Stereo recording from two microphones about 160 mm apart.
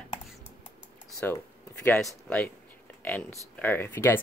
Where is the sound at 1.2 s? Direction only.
15° left (ahead or behind).